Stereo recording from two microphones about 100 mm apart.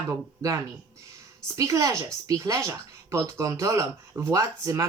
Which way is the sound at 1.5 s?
35° right (ahead or behind).